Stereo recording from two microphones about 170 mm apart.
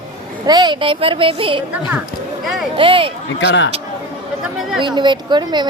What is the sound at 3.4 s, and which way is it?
Speech, 90° left.